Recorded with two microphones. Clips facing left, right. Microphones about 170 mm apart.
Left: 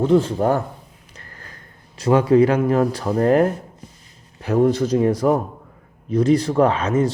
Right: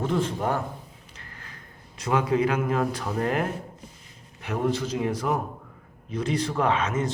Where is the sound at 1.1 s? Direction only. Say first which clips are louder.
Left 6 dB; 40° left (ahead or behind).